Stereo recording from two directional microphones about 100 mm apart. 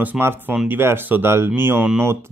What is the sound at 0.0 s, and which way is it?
A man's voice, 20° right (ahead or behind).